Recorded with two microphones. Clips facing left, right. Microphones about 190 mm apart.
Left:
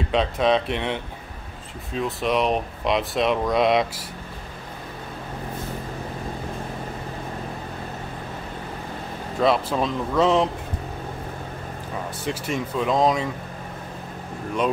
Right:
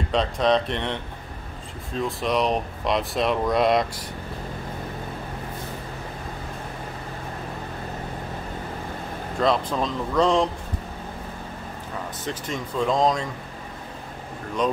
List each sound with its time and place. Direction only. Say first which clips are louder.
0.1 s speech: left 1 dB; 5° left (ahead or behind)
2.0 s speech: left 1 dB; centre (ahead or behind)
9.4 s speech: left 2 dB; 5° left (ahead or behind)
12.3 s speech: left 4 dB; 10° left (ahead or behind)